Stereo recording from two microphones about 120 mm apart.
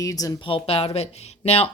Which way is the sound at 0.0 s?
30° left (ahead or behind).